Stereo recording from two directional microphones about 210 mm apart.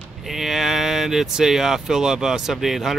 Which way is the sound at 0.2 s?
Centre (ahead or behind).